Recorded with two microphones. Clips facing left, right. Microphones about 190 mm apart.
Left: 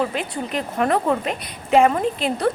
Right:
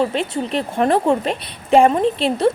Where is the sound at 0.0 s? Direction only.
25° right (ahead or behind).